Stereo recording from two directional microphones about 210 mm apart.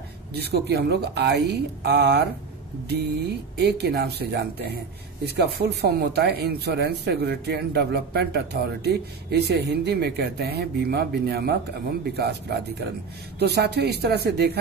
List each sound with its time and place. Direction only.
0.3 s speech: 50° right (ahead or behind)
3.5 s speech: 50° right (ahead or behind)